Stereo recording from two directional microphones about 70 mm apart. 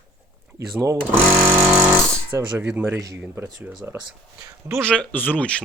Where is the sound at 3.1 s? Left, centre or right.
Right.